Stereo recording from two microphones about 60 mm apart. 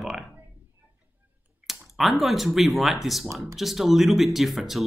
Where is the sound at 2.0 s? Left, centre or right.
Centre.